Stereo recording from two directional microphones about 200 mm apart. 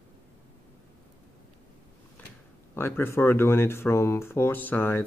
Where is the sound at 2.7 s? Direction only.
10° left (ahead or behind).